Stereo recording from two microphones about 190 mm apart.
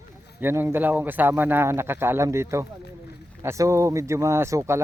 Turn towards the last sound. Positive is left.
turn(degrees=-15)  # may be behind; listen again after turning